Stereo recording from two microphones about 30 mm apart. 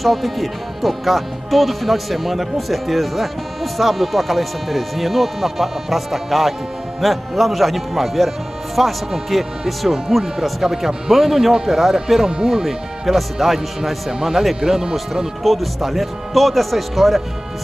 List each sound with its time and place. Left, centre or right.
0.0 s speech: centre
13.0 s speech: centre
14.6 s speech: right
15.4 s speech: centre